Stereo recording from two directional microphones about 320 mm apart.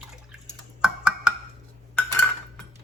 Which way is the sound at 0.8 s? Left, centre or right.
Centre.